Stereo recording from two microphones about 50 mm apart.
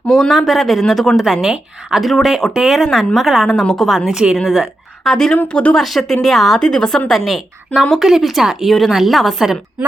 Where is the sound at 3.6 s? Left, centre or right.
Centre.